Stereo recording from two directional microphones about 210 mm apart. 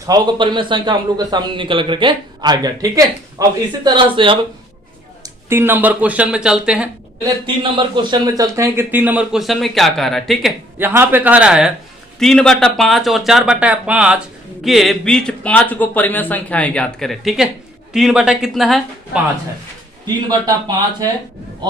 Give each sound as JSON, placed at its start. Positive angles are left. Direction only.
{"t": 0.0, "sound": "a man's voice", "side_deg": -20}
{"t": 5.2, "sound": "a man's voice", "side_deg": -10}
{"t": 7.4, "sound": "a man's voice", "side_deg": -20}
{"t": 10.8, "sound": "a man's voice", "side_deg": -10}
{"t": 20.2, "sound": "a man's voice", "side_deg": -20}